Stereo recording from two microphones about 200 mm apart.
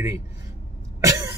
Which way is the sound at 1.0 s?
15° right (ahead or behind).